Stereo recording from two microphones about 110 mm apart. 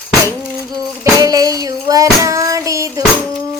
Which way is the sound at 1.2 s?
35° right (ahead or behind).